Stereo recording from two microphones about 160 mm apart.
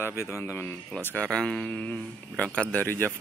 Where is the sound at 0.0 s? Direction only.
15° left (ahead or behind).